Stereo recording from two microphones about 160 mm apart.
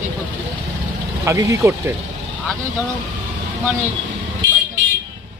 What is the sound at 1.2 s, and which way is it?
Speech, 20° right (ahead or behind).